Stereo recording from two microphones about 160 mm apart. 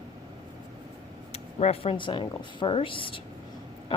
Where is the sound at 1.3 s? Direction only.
40° left (ahead or behind).